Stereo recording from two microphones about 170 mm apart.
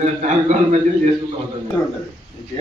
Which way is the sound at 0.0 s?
45° right (ahead or behind).